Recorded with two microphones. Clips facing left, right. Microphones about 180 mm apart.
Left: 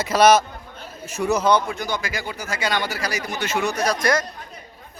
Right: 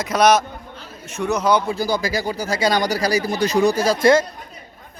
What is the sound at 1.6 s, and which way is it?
Speech, 35° right (ahead or behind).